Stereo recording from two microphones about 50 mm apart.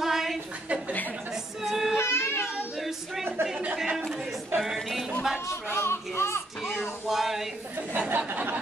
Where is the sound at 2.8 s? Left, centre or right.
Centre.